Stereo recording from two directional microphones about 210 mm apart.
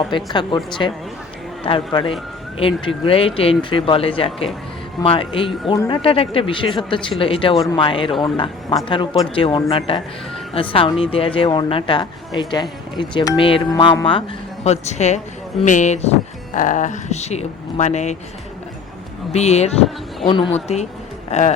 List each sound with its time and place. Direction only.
0.3 s speech: 20° left (ahead or behind)
19.3 s speech: 30° left (ahead or behind)